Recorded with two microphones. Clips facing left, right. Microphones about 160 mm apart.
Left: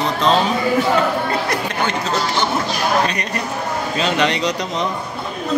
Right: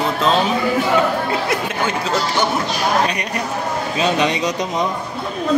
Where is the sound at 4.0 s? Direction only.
20° right (ahead or behind).